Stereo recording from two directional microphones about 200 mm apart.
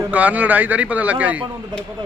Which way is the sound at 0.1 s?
5° right (ahead or behind).